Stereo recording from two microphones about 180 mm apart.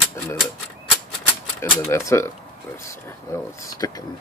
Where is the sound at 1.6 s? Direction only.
15° left (ahead or behind).